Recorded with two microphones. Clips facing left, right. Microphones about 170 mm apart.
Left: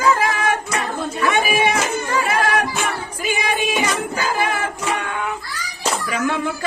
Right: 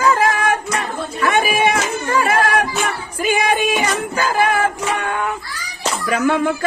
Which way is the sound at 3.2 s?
50° right (ahead or behind).